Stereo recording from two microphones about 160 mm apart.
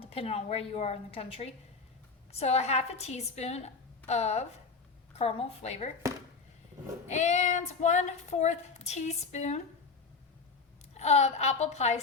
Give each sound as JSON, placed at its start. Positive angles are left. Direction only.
{"t": 0.0, "sound": "a woman's voice", "side_deg": 35}
{"t": 4.0, "sound": "female singing", "side_deg": 45}
{"t": 5.1, "sound": "a woman's voice", "side_deg": 40}
{"t": 7.1, "sound": "female singing", "side_deg": 45}
{"t": 10.9, "sound": "female singing", "side_deg": 45}